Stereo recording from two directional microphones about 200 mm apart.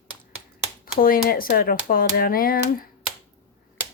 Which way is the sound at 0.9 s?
45° left (ahead or behind).